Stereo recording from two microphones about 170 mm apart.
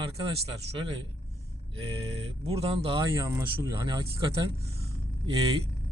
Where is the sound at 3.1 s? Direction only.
15° right (ahead or behind).